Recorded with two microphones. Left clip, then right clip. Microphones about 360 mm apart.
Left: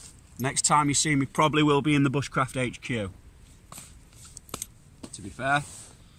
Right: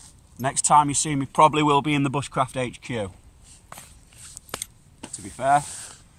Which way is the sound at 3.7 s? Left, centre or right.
Right.